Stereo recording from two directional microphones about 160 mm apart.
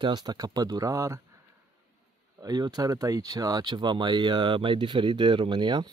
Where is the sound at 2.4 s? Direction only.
25° right (ahead or behind).